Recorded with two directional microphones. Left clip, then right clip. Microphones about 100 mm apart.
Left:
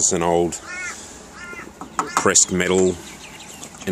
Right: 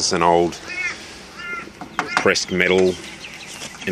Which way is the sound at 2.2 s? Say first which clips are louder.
Right 1 dB; 65° left (ahead or behind).